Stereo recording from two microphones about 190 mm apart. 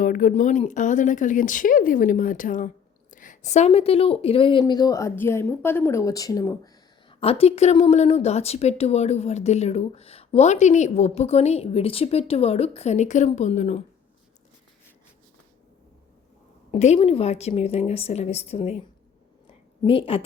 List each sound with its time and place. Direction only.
0.0 s speech: 45° left (ahead or behind); by 6.6 s 15° left (ahead or behind)
7.1 s speech: 30° left (ahead or behind)
16.7 s speech: 35° left (ahead or behind)
19.8 s a woman's voice: 30° left (ahead or behind)